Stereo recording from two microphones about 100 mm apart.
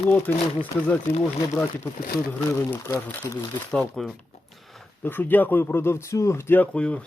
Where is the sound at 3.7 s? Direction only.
5° left (ahead or behind).